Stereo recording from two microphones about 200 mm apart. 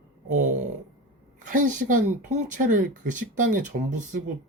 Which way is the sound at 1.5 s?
40° right (ahead or behind).